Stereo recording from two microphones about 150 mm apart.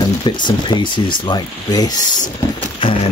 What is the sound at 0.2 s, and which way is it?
Speech, 30° left (ahead or behind).